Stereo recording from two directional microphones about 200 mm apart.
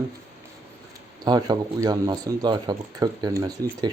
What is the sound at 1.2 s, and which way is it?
A man's voice, 20° right (ahead or behind).